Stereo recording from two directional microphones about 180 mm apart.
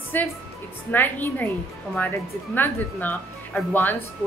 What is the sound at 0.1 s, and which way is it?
A woman's voice, 10° left (ahead or behind).